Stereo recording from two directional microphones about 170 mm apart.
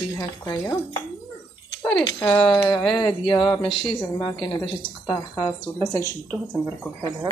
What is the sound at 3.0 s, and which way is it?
Speech, 25° left (ahead or behind).